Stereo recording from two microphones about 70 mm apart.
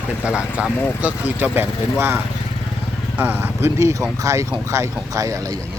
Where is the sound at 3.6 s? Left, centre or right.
Right.